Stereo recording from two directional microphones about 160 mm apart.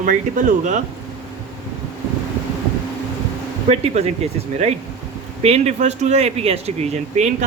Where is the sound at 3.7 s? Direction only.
40° right (ahead or behind).